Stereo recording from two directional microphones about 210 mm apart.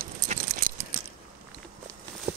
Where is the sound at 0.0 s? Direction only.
40° right (ahead or behind).